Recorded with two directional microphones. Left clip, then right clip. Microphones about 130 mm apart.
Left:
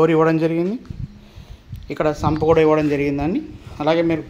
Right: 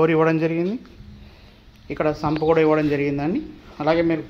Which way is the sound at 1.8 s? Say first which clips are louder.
Left 2 dB; 20° left (ahead or behind).